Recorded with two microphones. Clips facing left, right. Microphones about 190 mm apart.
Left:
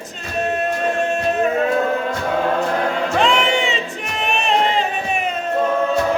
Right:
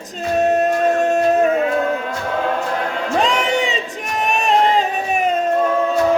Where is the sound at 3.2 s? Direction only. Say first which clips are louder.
Left 1 dB; 40° right (ahead or behind).